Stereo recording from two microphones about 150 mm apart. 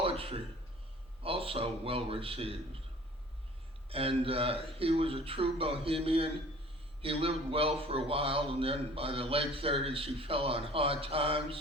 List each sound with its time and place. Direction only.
0.0 s a sound: 40° right (ahead or behind)
1.2 s a man's voice: 40° right (ahead or behind)
3.8 s a man's voice: 40° right (ahead or behind)